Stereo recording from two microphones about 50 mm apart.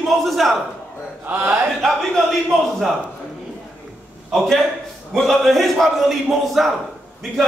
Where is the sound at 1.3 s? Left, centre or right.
Right.